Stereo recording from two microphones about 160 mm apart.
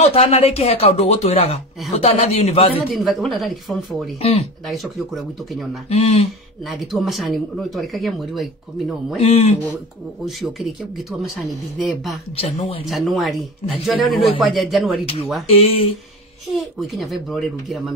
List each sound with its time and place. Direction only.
0.0 s speech: 40° left (ahead or behind)
2.9 s speech: centre (ahead or behind)
4.2 s speech: 40° left (ahead or behind)
4.6 s speech: centre (ahead or behind)
5.9 s speech: 40° left (ahead or behind)
6.6 s speech: centre (ahead or behind)
9.2 s speech: 40° left (ahead or behind)
10.2 s speech: centre (ahead or behind)
12.4 s speech: 40° left (ahead or behind)
12.8 s speech: centre (ahead or behind)
15.4 s speech: 40° left (ahead or behind)
16.8 s speech: centre (ahead or behind)